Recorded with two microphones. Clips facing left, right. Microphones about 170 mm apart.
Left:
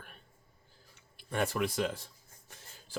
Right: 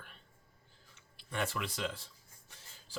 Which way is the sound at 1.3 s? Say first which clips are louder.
Left 6 dB; 45° left (ahead or behind).